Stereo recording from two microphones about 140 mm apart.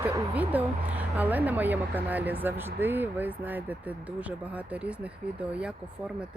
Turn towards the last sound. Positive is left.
turn(degrees=-10)  # may be behind; listen again after turning